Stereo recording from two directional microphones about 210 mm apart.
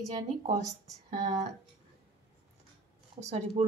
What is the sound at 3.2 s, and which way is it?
Speech, 30° right (ahead or behind).